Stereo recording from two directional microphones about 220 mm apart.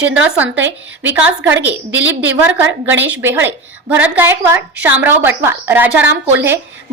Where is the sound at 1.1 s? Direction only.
10° right (ahead or behind).